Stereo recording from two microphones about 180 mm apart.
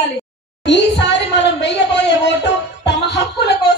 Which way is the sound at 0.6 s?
75° left (ahead or behind).